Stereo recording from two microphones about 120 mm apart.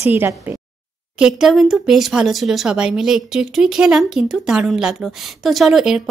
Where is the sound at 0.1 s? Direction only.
15° right (ahead or behind).